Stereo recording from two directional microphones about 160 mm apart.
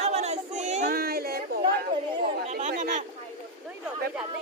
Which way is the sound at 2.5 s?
50° right (ahead or behind).